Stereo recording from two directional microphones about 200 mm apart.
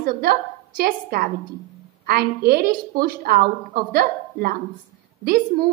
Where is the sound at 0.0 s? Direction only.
50° right (ahead or behind).